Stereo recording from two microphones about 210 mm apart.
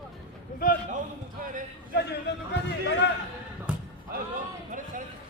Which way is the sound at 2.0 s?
55° left (ahead or behind).